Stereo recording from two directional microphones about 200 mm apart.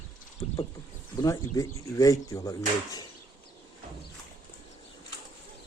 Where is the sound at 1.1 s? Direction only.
15° left (ahead or behind).